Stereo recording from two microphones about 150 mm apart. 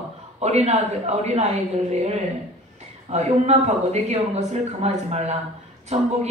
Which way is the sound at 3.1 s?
45° right (ahead or behind).